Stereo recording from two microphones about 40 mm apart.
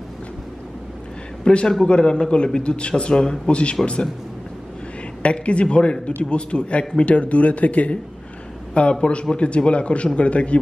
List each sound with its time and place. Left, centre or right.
1.4 s a man's voice: left
5.2 s a man's voice: left
9.0 s a man's voice: left